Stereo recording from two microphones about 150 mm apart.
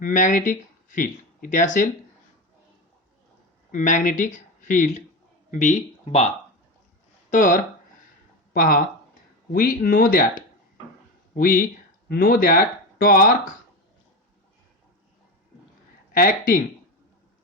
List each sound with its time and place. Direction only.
0.0 s speech: 60° left (ahead or behind)
3.7 s speech: 60° left (ahead or behind)
7.3 s speech: 60° left (ahead or behind)
8.5 s speech: 70° left (ahead or behind)
16.1 s speech: 85° left